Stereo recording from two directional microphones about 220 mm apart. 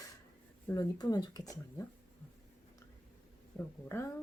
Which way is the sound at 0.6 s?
15° left (ahead or behind).